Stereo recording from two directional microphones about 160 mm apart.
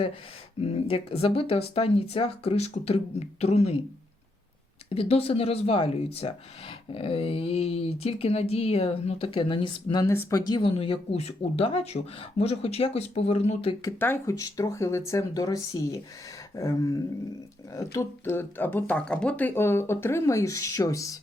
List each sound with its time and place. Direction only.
0.6 s speech: 40° left (ahead or behind)
4.9 s speech: 35° left (ahead or behind)
10.1 s speech: 15° left (ahead or behind); by 13.7 s 40° left (ahead or behind)
13.8 s speech: 15° left (ahead or behind)